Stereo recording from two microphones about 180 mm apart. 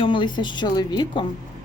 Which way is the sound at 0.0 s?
25° left (ahead or behind).